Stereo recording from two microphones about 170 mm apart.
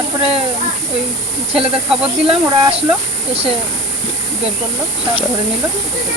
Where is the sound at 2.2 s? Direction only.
35° right (ahead or behind).